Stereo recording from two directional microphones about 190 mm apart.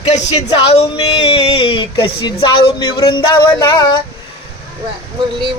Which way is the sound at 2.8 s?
25° left (ahead or behind).